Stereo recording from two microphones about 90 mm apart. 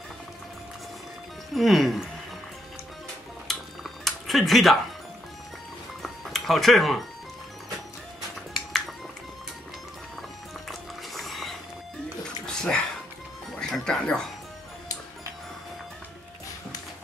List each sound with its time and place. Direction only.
1.5 s speech: centre (ahead or behind)
3.5 s dishes: centre (ahead or behind)
4.0 s a sound: centre (ahead or behind)
6.0 s music: centre (ahead or behind)
8.5 s music: centre (ahead or behind)
10.7 s music: centre (ahead or behind)